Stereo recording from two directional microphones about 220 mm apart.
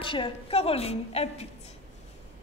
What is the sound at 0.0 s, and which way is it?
A woman's voice, 25° left (ahead or behind).